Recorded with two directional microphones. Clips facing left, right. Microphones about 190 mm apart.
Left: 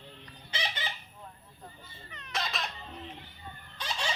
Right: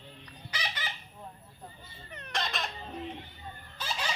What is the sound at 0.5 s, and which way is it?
Fowl, 25° left (ahead or behind).